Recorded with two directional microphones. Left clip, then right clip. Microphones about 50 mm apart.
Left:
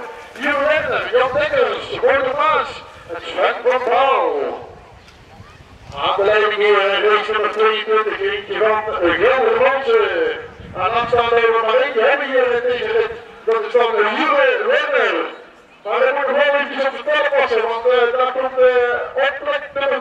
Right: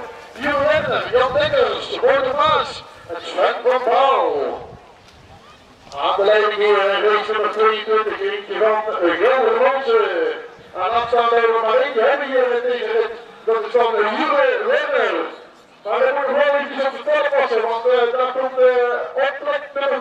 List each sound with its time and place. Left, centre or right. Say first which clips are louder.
0.4 s a sound: left 1 dB; right
1.8 s a man's voice: left 1 dB; right
5.9 s a man's voice: even; centre; by 18.9 s left
19.2 s a man's voice: left 2 dB; centre